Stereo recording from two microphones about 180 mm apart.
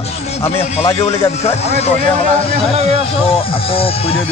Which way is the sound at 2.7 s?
35° right (ahead or behind).